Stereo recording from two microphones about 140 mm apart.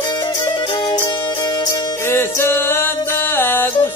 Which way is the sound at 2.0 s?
20° left (ahead or behind).